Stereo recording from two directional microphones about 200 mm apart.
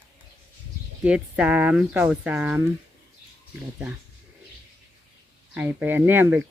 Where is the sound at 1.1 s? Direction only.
5° right (ahead or behind).